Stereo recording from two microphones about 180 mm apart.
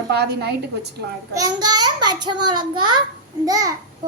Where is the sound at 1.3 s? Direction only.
20° right (ahead or behind).